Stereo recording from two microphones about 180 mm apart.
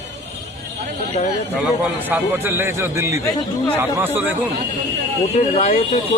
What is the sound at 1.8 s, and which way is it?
A man's voice, 10° right (ahead or behind).